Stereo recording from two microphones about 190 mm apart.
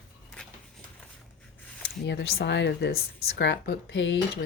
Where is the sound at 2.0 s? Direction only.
65° left (ahead or behind).